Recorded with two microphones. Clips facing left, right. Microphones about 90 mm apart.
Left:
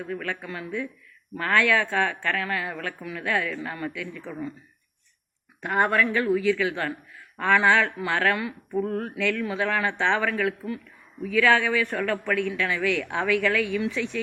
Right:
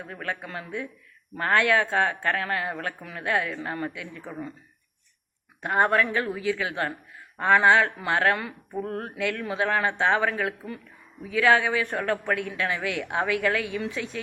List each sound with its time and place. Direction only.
0.0 s a woman's voice: 30° right (ahead or behind)
5.6 s a man's voice: 25° right (ahead or behind)